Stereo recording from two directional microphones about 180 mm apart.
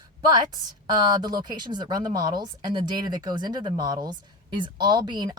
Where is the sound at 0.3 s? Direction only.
20° right (ahead or behind).